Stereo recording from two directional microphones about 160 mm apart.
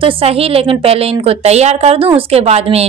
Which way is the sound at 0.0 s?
35° right (ahead or behind).